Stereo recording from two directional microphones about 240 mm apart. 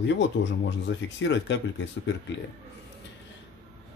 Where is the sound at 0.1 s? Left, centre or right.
Left.